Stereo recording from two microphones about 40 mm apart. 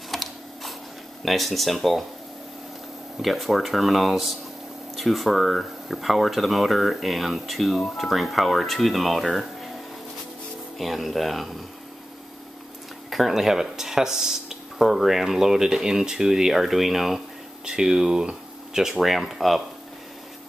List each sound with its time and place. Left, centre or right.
0.1 s a sound: centre
1.2 s speech: centre
3.2 s speech: centre
10.8 s speech: centre
13.1 s speech: centre
18.9 s speech: centre